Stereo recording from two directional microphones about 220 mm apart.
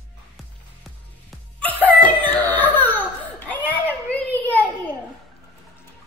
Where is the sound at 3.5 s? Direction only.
5° left (ahead or behind).